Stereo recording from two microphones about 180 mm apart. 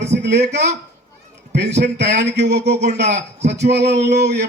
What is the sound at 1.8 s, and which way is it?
A man's voice, 70° right (ahead or behind).